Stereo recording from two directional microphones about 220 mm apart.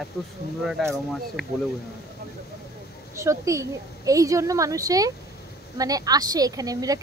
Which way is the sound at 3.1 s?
15° right (ahead or behind).